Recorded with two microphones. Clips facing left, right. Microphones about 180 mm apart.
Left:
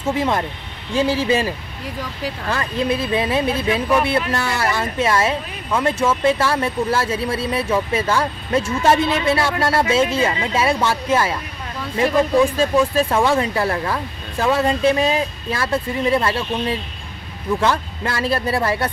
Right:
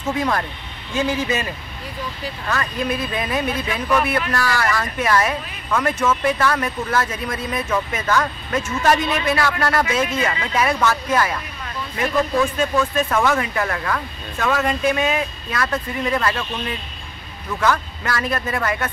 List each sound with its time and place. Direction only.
0.0 s speech: 25° left (ahead or behind)
2.5 s speech: 30° left (ahead or behind)